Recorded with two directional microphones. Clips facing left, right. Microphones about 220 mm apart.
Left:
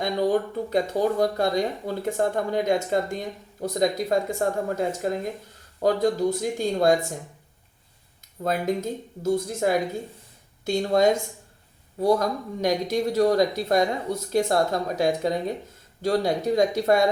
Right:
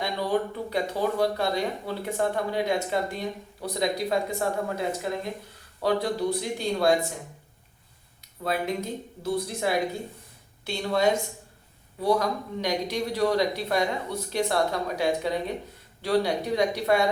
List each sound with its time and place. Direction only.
0.0 s speech: 45° left (ahead or behind)
9.2 s speech: 45° left (ahead or behind)